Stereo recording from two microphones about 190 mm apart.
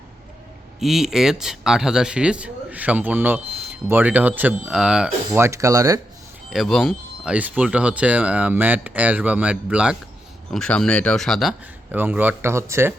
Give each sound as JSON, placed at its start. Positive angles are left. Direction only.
{"t": 0.8, "sound": "speech", "side_deg": 0}
{"t": 6.5, "sound": "speech", "side_deg": 0}